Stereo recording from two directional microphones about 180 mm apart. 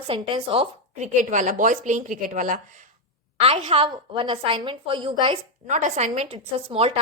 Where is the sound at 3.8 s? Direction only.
25° right (ahead or behind).